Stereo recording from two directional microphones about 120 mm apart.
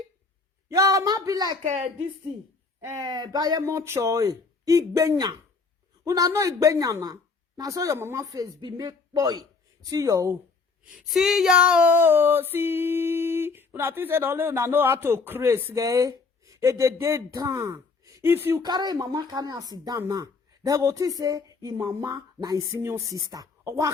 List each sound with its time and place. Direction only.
0.7 s a woman's voice: 30° right (ahead or behind)
1.6 s speech: 70° right (ahead or behind)
3.0 s a woman's voice: 35° right (ahead or behind)
10.9 s female singing: centre (ahead or behind); by 15.7 s 15° right (ahead or behind)
15.7 s speech: 30° right (ahead or behind)
18.6 s a woman's voice: 35° right (ahead or behind)